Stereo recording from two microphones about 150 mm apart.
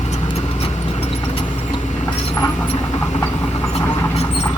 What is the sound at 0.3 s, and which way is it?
Vehicle, 40° left (ahead or behind).